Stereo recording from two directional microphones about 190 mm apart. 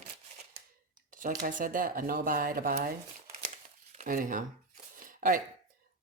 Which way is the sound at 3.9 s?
45° right (ahead or behind).